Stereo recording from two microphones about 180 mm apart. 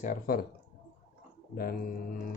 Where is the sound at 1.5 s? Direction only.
55° left (ahead or behind).